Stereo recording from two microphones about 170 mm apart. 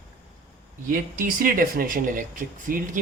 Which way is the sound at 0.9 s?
55° right (ahead or behind).